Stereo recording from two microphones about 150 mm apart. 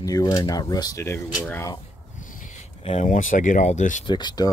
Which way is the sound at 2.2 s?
60° left (ahead or behind).